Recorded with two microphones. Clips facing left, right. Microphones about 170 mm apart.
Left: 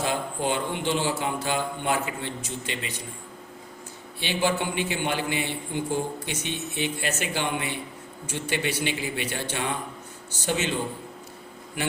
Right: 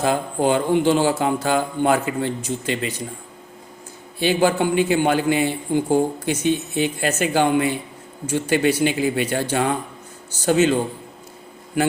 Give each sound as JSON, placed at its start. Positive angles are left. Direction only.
{"t": 0.0, "sound": "a man's voice", "side_deg": -40}
{"t": 4.2, "sound": "a man's voice", "side_deg": -45}